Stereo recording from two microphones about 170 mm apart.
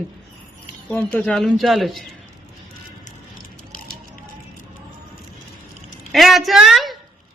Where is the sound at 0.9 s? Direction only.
5° left (ahead or behind).